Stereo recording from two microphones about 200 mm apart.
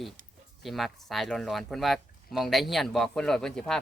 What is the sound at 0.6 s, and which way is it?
Speech, centre (ahead or behind).